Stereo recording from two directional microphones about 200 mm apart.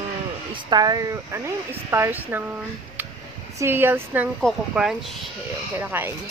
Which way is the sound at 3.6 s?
10° right (ahead or behind).